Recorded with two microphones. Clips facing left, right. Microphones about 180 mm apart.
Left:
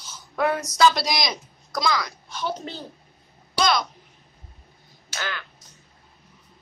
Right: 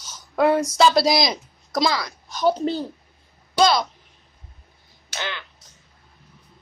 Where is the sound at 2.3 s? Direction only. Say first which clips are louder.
Right 10 dB; 40° right (ahead or behind).